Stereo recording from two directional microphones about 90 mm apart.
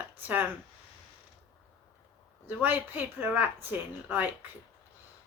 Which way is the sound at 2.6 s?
20° right (ahead or behind).